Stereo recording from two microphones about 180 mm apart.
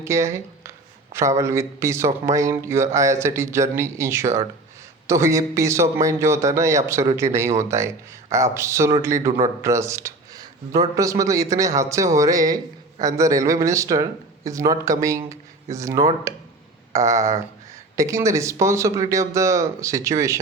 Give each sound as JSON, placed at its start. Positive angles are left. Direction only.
{"t": 0.0, "sound": "a man's voice", "side_deg": -15}